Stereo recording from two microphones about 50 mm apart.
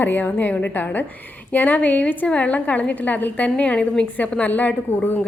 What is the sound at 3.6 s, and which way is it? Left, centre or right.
Speech, left.